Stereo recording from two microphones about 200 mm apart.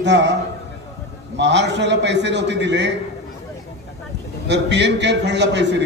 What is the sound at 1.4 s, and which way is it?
A man's voice, 60° right (ahead or behind).